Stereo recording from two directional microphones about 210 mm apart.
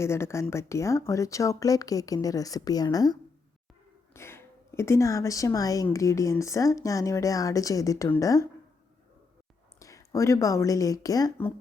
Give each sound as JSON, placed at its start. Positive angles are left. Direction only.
{"t": 0.0, "sound": "a woman's voice", "side_deg": 10}
{"t": 9.8, "sound": "speech", "side_deg": 15}